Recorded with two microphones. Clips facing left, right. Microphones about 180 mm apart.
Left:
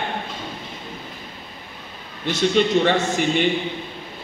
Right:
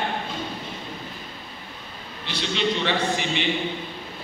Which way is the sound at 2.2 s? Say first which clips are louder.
Left 7 dB; 45° left (ahead or behind).